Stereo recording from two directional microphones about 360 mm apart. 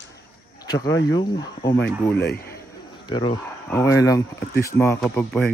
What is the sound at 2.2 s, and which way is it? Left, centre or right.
Speech, left.